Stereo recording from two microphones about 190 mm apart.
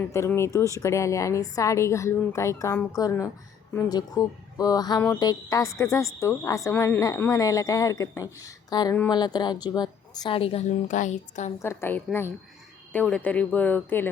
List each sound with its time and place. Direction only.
0.1 s a woman's voice: 15° left (ahead or behind)
10.8 s speech: 40° left (ahead or behind)
11.6 s speech: 15° left (ahead or behind)